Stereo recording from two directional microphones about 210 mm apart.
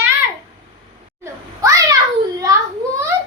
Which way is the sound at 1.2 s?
15° right (ahead or behind).